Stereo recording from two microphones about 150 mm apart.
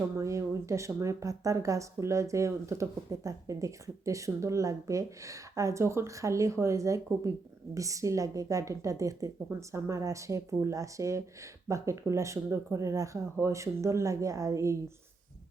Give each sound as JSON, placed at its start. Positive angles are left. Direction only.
{"t": 0.2, "sound": "speech", "side_deg": -20}